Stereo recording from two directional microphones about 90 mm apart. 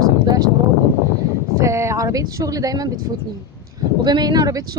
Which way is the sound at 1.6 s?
30° right (ahead or behind).